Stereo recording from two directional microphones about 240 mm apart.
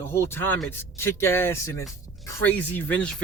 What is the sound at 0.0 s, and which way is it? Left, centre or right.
Speech, centre.